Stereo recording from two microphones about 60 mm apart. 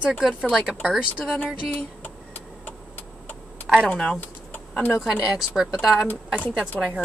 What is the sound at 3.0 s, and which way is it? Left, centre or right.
Vehicle, left.